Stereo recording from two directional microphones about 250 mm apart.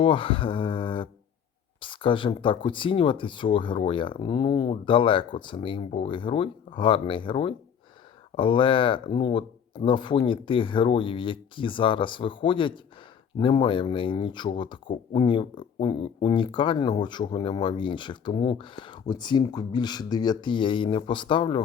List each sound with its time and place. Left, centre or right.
0.0 s speech: left